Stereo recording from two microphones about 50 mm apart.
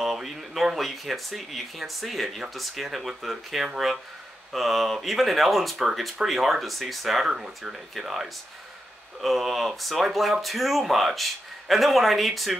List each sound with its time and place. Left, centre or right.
0.0 s speech: centre